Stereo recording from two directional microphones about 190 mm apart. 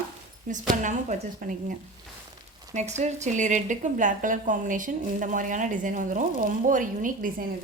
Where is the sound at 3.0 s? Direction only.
40° right (ahead or behind).